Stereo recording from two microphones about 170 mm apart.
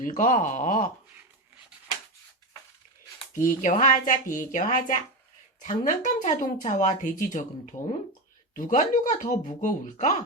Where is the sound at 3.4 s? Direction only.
45° left (ahead or behind).